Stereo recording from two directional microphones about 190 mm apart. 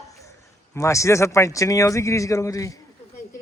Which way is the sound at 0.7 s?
15° left (ahead or behind).